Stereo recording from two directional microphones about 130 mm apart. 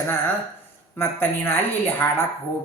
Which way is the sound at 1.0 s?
15° left (ahead or behind).